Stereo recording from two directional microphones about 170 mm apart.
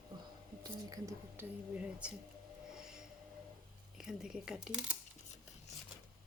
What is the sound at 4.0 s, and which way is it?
A woman's voice, 5° right (ahead or behind).